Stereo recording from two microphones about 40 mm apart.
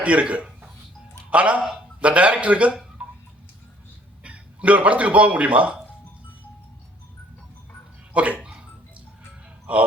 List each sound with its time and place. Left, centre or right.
0.0 s speech: right
3.0 s tick-tock: right
4.2 s a man's voice: right
8.1 s speech: right
8.4 s a sound: right
9.7 s speech: right